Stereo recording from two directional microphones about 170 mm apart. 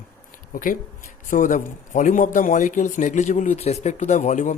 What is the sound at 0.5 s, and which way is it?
A man's voice, 55° left (ahead or behind).